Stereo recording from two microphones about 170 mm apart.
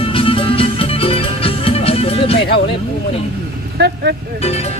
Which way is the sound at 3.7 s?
75° right (ahead or behind).